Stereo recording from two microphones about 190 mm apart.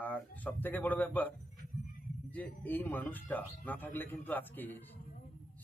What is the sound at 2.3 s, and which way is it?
A man's voice, 10° left (ahead or behind).